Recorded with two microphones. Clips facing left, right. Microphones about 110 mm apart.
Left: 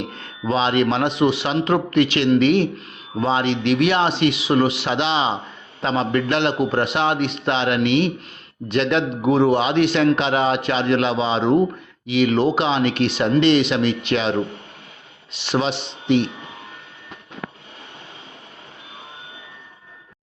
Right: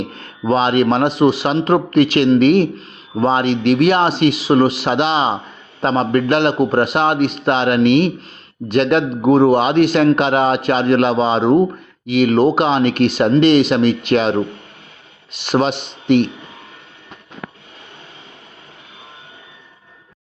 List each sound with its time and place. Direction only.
0.1 s a man's voice: 40° right (ahead or behind)
15.4 s a man's voice: 50° right (ahead or behind)